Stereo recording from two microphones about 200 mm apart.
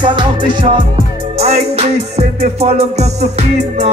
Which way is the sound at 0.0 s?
25° right (ahead or behind).